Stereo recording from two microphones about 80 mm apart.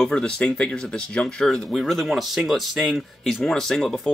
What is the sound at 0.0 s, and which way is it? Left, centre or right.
Speech, centre.